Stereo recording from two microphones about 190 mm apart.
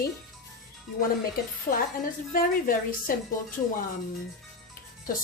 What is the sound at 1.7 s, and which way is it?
Speech, 45° left (ahead or behind).